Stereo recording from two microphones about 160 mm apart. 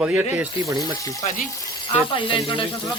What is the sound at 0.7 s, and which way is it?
Speech, 20° right (ahead or behind).